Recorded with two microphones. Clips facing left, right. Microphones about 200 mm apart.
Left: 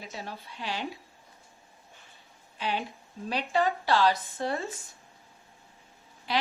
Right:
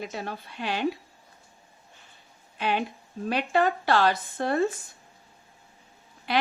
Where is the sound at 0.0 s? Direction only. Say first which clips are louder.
Right 6 dB; 60° right (ahead or behind).